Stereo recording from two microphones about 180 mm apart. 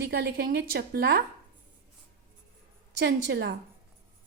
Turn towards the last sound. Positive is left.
turn(degrees=-70)  # may be behind; listen again after turning